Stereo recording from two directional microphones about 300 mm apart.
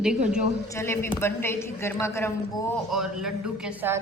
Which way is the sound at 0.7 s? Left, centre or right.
Centre.